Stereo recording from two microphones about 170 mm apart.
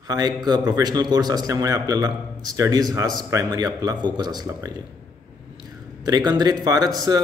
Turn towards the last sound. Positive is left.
turn(degrees=-25)  # may be behind; listen again after turning